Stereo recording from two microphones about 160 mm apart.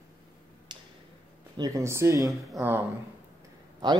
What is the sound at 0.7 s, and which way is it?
Tick-tock, 30° right (ahead or behind).